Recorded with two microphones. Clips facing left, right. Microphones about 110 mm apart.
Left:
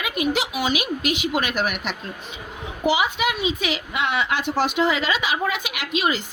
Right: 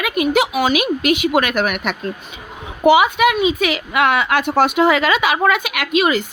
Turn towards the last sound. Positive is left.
turn(degrees=-60)  # may be behind; listen again after turning